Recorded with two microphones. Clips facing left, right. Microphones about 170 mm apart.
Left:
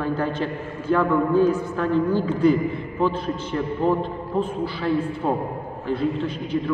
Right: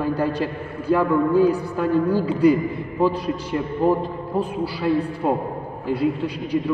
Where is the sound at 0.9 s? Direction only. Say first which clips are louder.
Right 1 dB; 10° right (ahead or behind).